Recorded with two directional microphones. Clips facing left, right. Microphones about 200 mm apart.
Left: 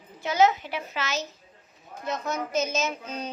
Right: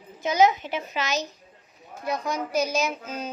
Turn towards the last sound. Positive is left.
turn(degrees=-5)  # may be behind; listen again after turning